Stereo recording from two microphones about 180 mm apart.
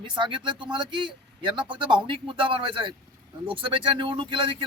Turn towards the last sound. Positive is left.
turn(degrees=-30)  # may be behind; listen again after turning